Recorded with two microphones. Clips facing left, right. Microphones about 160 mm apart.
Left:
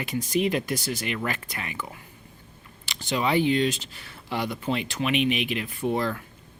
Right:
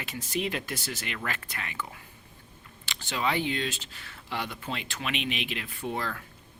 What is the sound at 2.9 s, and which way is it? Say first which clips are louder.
Speech: left 6 dB; 15° left (ahead or behind).